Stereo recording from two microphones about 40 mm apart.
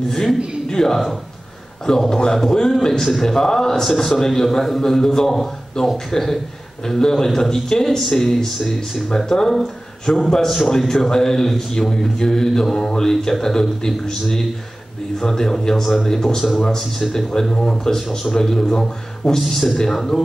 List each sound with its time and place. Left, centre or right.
0.1 s a man's voice: centre
3.8 s a man's voice: centre
19.4 s a man's voice: centre